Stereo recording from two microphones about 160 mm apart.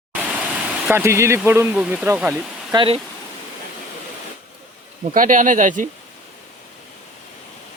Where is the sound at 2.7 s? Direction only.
35° right (ahead or behind).